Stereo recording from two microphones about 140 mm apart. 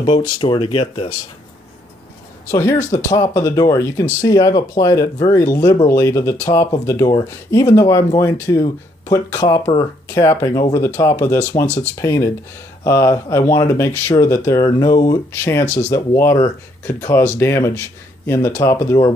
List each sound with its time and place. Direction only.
0.0 s speech: 40° left (ahead or behind)
2.5 s speech: 25° left (ahead or behind)
15.6 s speech: 55° left (ahead or behind)
15.9 s speech: 20° left (ahead or behind)